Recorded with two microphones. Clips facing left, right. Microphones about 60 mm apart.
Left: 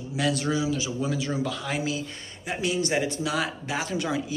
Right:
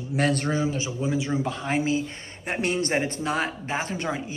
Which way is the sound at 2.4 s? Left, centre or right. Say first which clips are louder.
Right 1 dB; right.